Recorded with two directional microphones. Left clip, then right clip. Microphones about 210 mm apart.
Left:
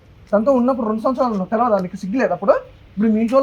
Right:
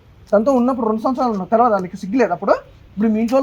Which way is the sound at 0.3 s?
15° left (ahead or behind).